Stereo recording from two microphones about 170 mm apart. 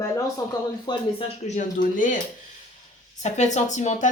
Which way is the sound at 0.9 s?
25° left (ahead or behind).